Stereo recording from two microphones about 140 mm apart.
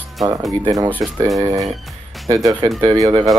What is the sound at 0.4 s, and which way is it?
Speech, 25° right (ahead or behind).